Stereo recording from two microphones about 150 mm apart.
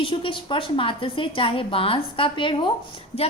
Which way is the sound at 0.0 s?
35° left (ahead or behind).